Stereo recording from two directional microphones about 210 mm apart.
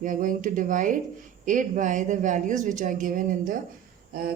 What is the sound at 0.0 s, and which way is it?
Speech, 40° right (ahead or behind).